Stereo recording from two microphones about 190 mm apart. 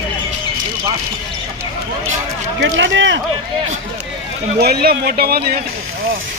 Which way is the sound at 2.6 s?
75° right (ahead or behind).